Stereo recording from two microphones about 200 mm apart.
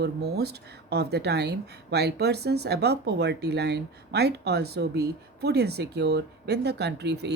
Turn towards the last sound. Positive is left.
turn(degrees=-55)  # may be behind; listen again after turning